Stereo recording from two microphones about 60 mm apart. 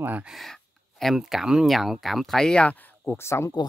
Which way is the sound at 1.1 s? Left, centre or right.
Centre.